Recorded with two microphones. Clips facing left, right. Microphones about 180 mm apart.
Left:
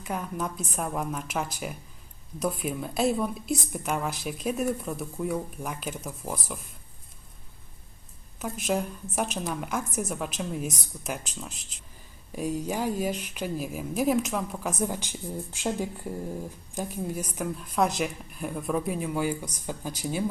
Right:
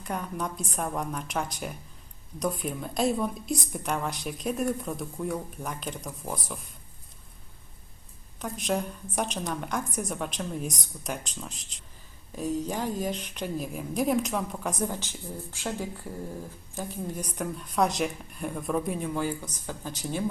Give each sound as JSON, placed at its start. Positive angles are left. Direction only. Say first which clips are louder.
{"t": 0.0, "sound": "a woman's voice", "louder": "left 1 dB", "side_deg": 0}
{"t": 8.4, "sound": "a woman's voice", "louder": "left 1 dB", "side_deg": 5}
{"t": 16.7, "sound": "a woman's voice", "louder": "left 2 dB", "side_deg": 10}